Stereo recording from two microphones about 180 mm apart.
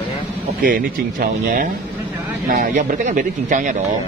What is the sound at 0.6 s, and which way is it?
Speech, 50° right (ahead or behind).